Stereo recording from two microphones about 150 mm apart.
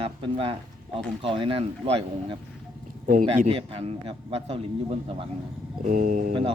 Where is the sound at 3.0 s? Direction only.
60° right (ahead or behind).